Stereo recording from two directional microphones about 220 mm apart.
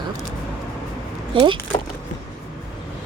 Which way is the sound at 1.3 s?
20° right (ahead or behind).